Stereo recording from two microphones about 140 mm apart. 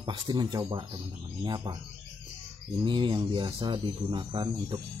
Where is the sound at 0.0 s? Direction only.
30° right (ahead or behind).